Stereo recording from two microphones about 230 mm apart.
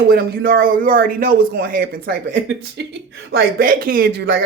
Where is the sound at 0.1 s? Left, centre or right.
Right.